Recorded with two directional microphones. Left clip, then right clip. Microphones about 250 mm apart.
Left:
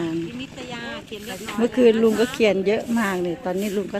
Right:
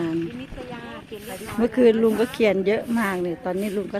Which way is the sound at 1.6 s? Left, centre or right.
Centre.